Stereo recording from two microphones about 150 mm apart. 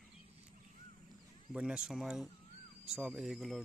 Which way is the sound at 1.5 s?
5° right (ahead or behind).